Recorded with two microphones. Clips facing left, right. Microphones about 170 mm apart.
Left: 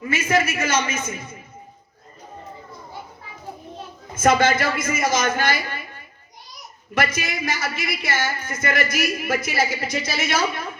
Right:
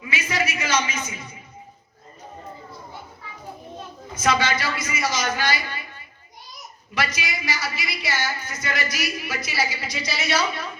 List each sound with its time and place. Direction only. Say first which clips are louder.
0.0 s a woman's voice: left 6 dB; 50° left (ahead or behind)
4.1 s a woman's voice: left 5 dB; 50° left (ahead or behind)
6.9 s a woman's voice: left 4 dB; 50° left (ahead or behind)